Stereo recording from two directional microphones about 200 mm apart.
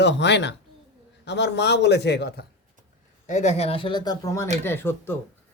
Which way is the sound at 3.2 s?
35° left (ahead or behind).